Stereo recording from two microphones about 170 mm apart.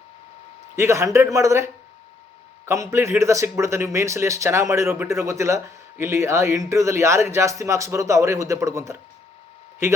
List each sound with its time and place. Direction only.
0.8 s speech: 15° right (ahead or behind)